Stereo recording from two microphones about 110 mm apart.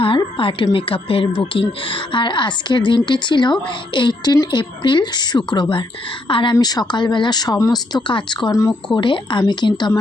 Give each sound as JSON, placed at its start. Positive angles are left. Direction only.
{"t": 0.3, "sound": "a woman's voice", "side_deg": 50}